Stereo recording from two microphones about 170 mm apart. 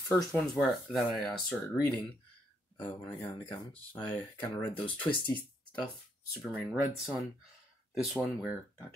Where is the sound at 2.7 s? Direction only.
30° left (ahead or behind).